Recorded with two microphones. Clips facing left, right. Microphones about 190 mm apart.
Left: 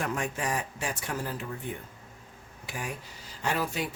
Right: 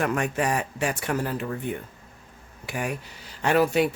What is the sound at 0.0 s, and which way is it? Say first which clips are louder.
Speech: right 7 dB; 65° right (ahead or behind).